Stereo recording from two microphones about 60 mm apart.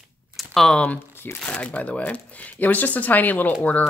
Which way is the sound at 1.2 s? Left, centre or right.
Left.